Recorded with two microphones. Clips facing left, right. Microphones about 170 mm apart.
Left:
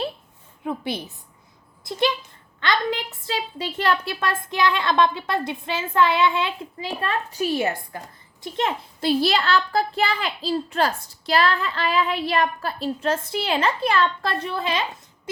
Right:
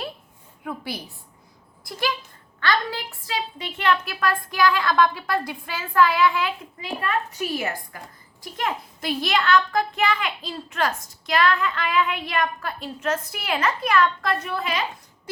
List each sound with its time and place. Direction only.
0.6 s a woman's voice: 25° left (ahead or behind)
3.6 s a woman's voice: 35° left (ahead or behind)